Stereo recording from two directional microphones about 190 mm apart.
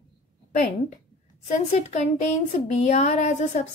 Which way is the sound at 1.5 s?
35° left (ahead or behind).